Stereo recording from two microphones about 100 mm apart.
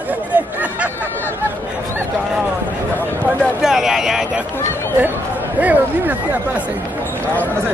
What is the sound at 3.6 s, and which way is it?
Speech, 5° right (ahead or behind).